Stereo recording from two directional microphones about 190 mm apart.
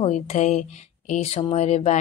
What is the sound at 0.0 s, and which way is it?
Speech, 35° left (ahead or behind).